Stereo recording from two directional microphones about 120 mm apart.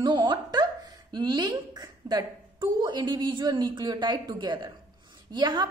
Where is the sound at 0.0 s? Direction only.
35° right (ahead or behind).